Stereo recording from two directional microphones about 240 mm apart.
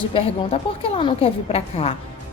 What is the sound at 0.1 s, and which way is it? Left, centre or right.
A woman's voice, left.